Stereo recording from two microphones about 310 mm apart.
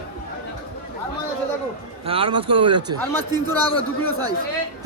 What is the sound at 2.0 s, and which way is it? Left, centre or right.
Speech, centre.